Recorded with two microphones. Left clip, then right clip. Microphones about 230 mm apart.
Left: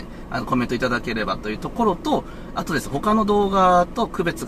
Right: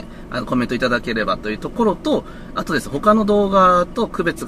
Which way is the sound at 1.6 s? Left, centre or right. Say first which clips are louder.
Right 2 dB; centre.